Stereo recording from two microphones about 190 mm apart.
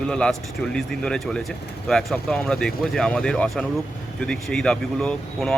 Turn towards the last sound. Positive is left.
turn(degrees=5)  # may be behind; listen again after turning